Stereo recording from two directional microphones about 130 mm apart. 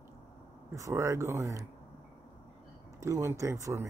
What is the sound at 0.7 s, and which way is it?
Speech, 20° right (ahead or behind).